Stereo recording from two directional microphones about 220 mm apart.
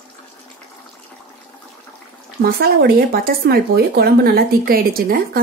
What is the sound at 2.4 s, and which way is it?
Speech, 45° right (ahead or behind).